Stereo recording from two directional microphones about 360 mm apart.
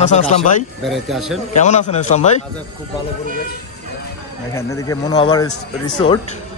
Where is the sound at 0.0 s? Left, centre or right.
Centre.